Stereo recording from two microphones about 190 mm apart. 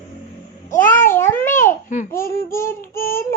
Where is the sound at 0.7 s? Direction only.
45° left (ahead or behind).